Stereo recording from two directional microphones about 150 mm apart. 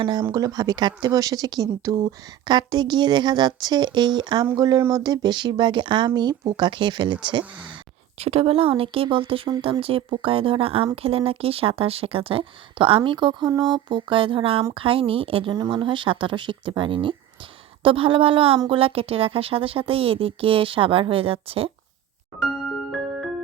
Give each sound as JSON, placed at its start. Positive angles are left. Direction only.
{"t": 0.0, "sound": "speech", "side_deg": -30}